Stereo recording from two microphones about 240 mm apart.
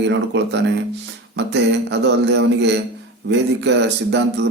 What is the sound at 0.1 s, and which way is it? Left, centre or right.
Speech, right.